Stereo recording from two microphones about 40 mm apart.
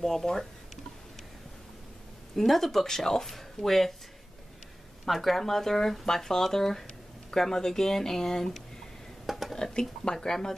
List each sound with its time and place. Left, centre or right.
0.0 s speech: centre
2.3 s speech: centre
5.0 s speech: centre
9.2 s whispering: centre
9.6 s speech: centre